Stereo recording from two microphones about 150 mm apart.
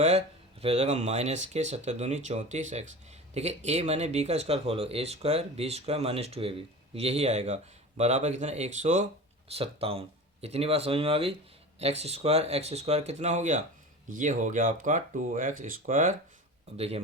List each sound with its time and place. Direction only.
0.0 s speech: 45° right (ahead or behind)
9.5 s speech: 40° right (ahead or behind); by 16.1 s 60° right (ahead or behind)
16.7 s speech: 40° right (ahead or behind)